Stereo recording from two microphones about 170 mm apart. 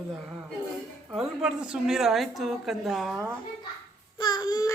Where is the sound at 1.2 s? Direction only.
5° right (ahead or behind).